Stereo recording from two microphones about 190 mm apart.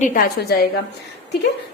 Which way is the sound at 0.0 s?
50° left (ahead or behind).